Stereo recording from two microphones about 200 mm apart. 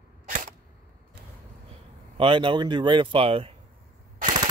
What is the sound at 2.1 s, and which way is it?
A man's voice, 25° right (ahead or behind).